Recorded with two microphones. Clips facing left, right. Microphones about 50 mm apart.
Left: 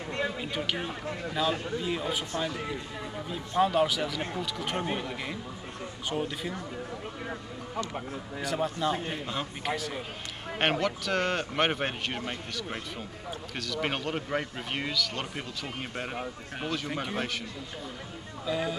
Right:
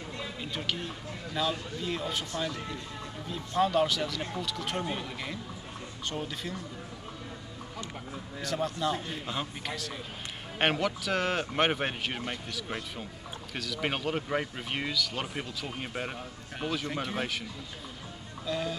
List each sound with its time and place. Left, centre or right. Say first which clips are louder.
0.4 s speech: left 3 dB; centre
8.4 s speech: left 2 dB; centre
18.4 s speech: left 2 dB; centre